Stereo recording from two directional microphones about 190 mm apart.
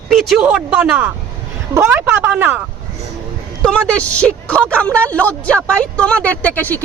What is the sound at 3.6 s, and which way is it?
A woman's voice, 5° left (ahead or behind).